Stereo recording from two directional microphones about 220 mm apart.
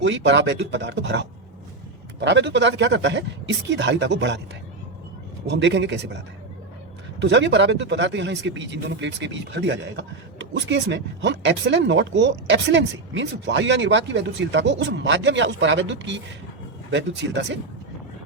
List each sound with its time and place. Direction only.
0.0 s speech: 55° right (ahead or behind)
5.5 s speech: 55° right (ahead or behind)
7.2 s speech: 55° right (ahead or behind)